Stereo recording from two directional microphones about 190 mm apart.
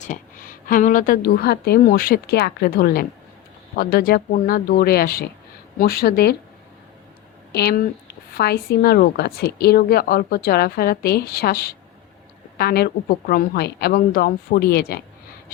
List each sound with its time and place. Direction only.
0.0 s a woman's voice: 45° left (ahead or behind)
7.5 s a woman's voice: 55° left (ahead or behind)